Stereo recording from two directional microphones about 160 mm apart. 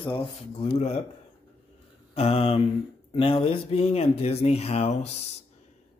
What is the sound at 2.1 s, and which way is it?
Speech, 40° left (ahead or behind).